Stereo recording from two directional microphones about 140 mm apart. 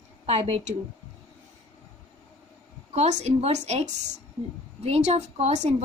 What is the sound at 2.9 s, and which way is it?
A woman's voice, 50° right (ahead or behind).